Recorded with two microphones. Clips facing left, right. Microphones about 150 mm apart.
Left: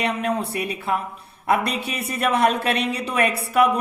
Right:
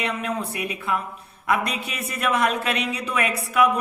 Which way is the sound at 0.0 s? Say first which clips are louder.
Left 3 dB; 35° left (ahead or behind).